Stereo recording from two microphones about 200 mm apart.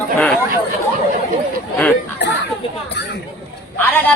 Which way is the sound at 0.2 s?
5° left (ahead or behind).